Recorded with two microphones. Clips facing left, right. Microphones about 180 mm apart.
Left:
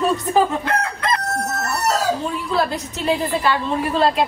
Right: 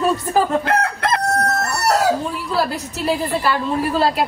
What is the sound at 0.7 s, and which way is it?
Crowing, 65° right (ahead or behind).